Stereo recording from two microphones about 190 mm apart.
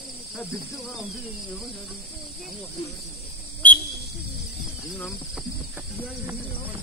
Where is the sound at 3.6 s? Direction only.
10° left (ahead or behind).